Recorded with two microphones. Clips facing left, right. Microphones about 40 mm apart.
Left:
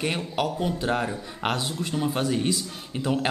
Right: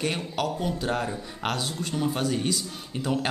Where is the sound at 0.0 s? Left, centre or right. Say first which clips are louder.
Left 1 dB; centre.